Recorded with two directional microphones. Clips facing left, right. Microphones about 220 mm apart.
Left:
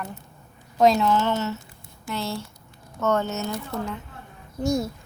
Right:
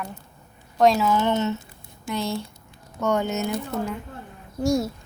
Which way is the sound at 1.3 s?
20° right (ahead or behind).